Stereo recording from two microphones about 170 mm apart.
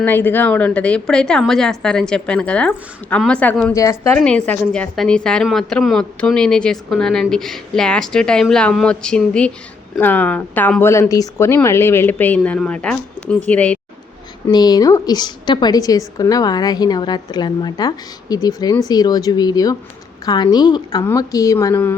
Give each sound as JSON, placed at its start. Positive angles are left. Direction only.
{"t": 0.0, "sound": "a woman's voice", "side_deg": 10}
{"t": 3.7, "sound": "a woman's voice", "side_deg": 20}
{"t": 4.1, "sound": "a woman's voice", "side_deg": 5}
{"t": 14.5, "sound": "a woman's voice", "side_deg": 25}